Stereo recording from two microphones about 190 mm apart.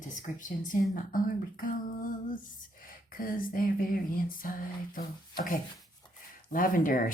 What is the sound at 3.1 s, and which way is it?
Speech, 45° left (ahead or behind).